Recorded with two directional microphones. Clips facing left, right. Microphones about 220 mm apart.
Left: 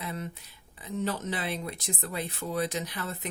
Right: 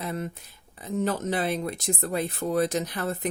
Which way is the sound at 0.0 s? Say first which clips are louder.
Right 5 dB; 50° right (ahead or behind).